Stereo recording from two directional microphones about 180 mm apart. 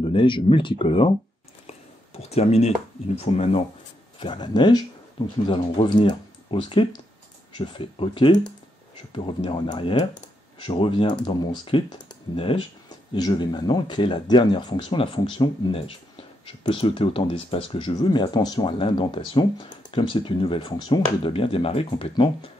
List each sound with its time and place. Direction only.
0.0 s speech: 30° left (ahead or behind)
1.7 s a sound: 35° left (ahead or behind)
3.2 s speech: 35° left (ahead or behind)